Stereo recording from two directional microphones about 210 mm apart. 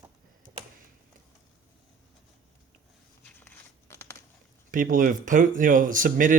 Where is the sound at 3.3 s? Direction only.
10° left (ahead or behind).